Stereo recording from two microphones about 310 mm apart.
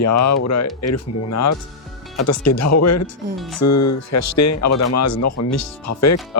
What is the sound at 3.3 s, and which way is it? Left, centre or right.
Speech, centre.